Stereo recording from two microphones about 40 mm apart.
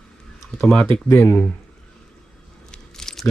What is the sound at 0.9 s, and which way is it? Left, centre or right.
Speech, left.